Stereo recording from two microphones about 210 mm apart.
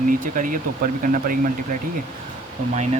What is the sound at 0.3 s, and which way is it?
Speech, 40° right (ahead or behind).